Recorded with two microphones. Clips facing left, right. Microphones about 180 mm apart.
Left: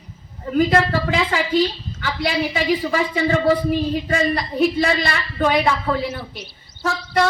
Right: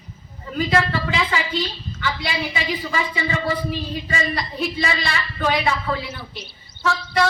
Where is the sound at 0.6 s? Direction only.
55° left (ahead or behind).